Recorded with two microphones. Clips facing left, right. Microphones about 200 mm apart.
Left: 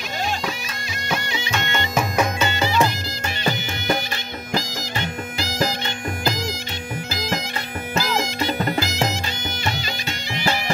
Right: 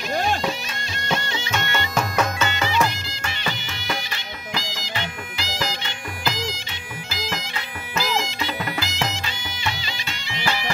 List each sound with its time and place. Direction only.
0.1 s music: 50° right (ahead or behind)
1.1 s music: 15° left (ahead or behind)
2.4 s music: 35° left (ahead or behind)
3.4 s music: 45° left (ahead or behind)
7.1 s bagpipes: 45° left (ahead or behind)
8.2 s music: 45° left (ahead or behind)
10.3 s music: 45° left (ahead or behind)